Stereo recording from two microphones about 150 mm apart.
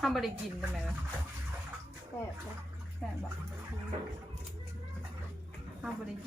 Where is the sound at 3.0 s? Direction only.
5° left (ahead or behind).